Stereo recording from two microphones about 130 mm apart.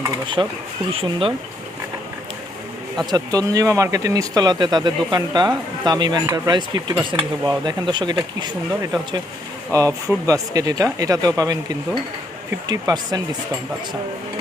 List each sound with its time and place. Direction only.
0.4 s speech: 25° right (ahead or behind)
0.9 s speech: 45° right (ahead or behind)
3.1 s speech: 25° right (ahead or behind)